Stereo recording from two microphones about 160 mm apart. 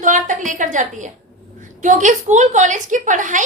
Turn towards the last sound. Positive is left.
turn(degrees=-50)  # may be behind; listen again after turning